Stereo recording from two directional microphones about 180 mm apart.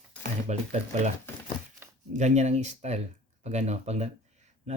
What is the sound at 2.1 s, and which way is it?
Speech, 40° right (ahead or behind).